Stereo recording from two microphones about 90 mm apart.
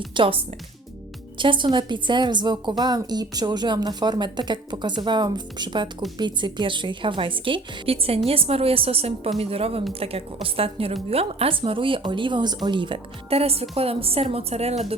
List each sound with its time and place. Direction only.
0.1 s speech: 80° right
1.4 s a woman's voice: 65° right (ahead or behind)
13.4 s a woman's voice: 90° right